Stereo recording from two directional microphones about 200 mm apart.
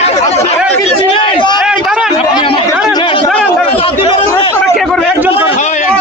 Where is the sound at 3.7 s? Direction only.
25° left (ahead or behind).